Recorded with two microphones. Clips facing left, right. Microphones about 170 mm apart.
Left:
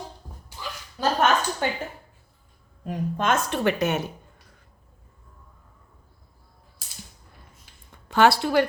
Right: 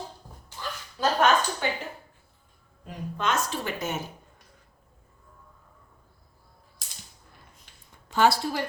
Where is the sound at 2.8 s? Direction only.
50° left (ahead or behind); by 4.0 s 70° left (ahead or behind).